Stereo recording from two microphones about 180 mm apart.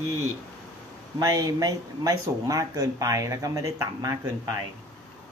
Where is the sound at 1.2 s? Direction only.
20° right (ahead or behind).